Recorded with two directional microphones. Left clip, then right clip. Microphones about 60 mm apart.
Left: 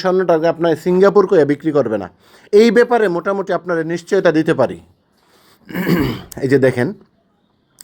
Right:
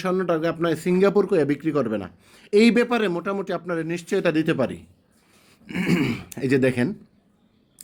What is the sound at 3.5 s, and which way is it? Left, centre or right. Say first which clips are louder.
Speech: left 9 dB; left.